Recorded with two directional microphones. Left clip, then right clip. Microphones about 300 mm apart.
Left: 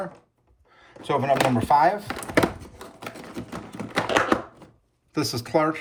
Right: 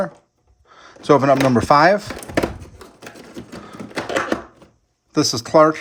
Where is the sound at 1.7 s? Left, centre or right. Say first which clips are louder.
Right 6 dB; right.